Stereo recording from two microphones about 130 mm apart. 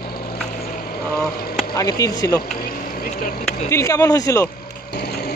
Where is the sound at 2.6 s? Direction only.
90° left; by 3.7 s 65° left (ahead or behind).